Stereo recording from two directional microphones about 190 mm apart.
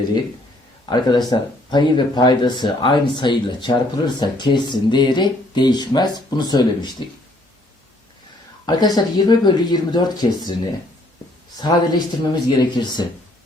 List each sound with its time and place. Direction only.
0.9 s speech: 20° left (ahead or behind)
8.6 s speech: 20° left (ahead or behind)